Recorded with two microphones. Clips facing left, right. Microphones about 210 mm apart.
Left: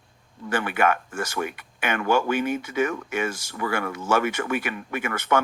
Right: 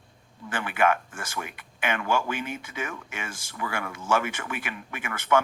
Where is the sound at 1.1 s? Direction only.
40° left (ahead or behind).